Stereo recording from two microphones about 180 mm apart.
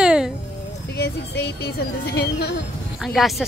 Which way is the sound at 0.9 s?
65° left (ahead or behind).